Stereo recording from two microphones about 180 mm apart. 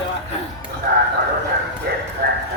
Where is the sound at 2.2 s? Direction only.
60° right (ahead or behind).